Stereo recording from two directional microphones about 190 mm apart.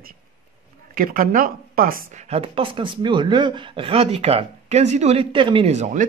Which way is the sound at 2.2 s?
30° right (ahead or behind).